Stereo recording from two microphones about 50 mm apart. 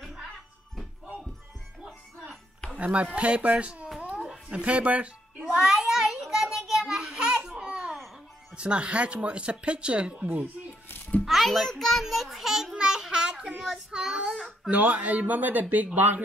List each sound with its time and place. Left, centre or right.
0.0 s music: centre
2.8 s speech: right
5.5 s a sound: centre
8.5 s speech: right
10.2 s speech: right
11.2 s a child's voice: centre
12.7 s babbling: centre
13.6 s child singing: centre
14.7 s speech: right